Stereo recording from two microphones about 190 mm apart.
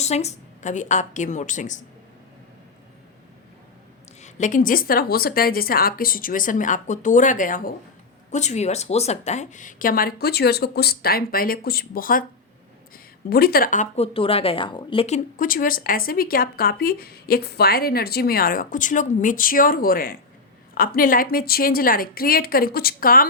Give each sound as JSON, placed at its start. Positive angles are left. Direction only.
{"t": 0.0, "sound": "a woman's voice", "side_deg": 35}
{"t": 4.2, "sound": "a woman's voice", "side_deg": 40}
{"t": 13.3, "sound": "a woman's voice", "side_deg": 50}